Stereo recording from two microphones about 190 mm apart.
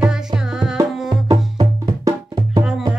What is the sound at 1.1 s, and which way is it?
Music, 25° right (ahead or behind).